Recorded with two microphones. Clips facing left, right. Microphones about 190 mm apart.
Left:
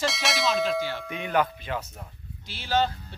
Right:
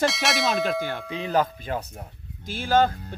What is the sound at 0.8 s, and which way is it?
Speech, 55° right (ahead or behind).